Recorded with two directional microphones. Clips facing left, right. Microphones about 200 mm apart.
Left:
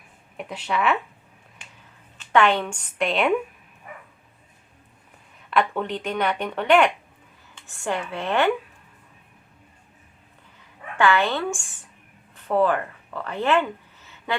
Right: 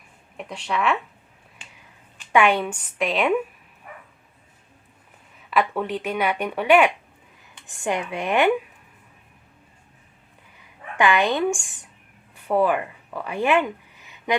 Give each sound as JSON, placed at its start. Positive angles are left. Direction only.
{"t": 0.3, "sound": "a woman's voice", "side_deg": 5}
{"t": 2.3, "sound": "a woman's voice", "side_deg": -10}
{"t": 5.4, "sound": "speech", "side_deg": -5}
{"t": 10.6, "sound": "speech", "side_deg": -15}